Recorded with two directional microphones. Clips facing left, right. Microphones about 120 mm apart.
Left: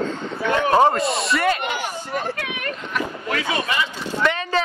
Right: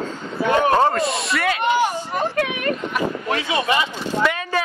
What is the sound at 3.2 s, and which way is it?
Speech, 25° right (ahead or behind).